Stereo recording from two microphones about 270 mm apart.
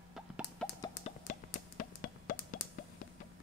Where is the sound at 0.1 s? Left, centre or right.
Centre.